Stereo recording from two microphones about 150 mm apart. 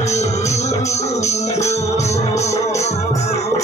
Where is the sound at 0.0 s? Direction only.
50° left (ahead or behind).